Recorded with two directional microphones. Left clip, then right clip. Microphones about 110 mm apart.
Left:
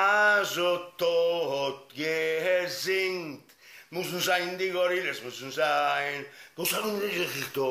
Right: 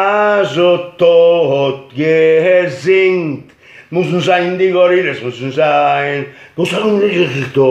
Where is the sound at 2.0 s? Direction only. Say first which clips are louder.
Right 18 dB; 20° left (ahead or behind).